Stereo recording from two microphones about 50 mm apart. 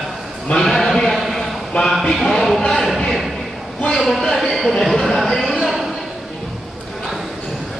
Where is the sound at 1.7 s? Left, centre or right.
Left.